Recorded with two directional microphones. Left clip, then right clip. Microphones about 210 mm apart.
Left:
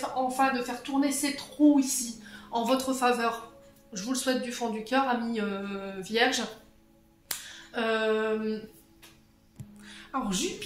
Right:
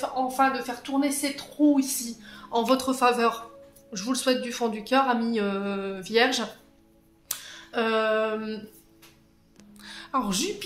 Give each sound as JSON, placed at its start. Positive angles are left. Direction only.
{"t": 0.3, "sound": "speech", "side_deg": -45}
{"t": 7.7, "sound": "speech", "side_deg": -50}
{"t": 9.8, "sound": "music", "side_deg": -45}